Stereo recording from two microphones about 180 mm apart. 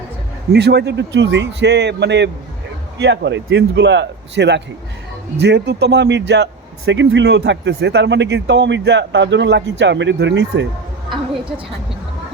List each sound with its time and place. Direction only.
0.5 s a man's voice: 70° right (ahead or behind)